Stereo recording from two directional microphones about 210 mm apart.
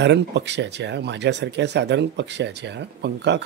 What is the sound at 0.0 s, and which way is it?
Speech, 55° right (ahead or behind).